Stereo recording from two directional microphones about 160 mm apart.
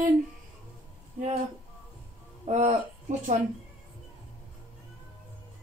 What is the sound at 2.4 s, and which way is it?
Speech, 50° right (ahead or behind).